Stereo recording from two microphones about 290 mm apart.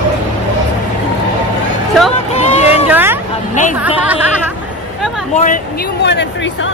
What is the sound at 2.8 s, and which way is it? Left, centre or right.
Vehicle, centre.